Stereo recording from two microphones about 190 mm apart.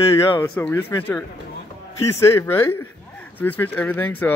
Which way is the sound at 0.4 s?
10° left (ahead or behind).